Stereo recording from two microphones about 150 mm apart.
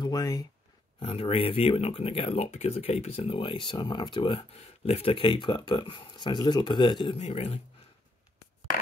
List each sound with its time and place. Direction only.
0.0 s speech: 25° left (ahead or behind)
0.9 s speech: 40° left (ahead or behind)